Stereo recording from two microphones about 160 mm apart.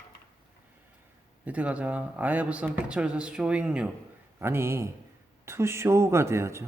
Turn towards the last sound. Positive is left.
turn(degrees=-15)  # may be behind; listen again after turning